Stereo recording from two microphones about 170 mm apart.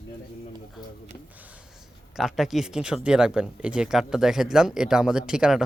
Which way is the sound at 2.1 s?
Centre (ahead or behind).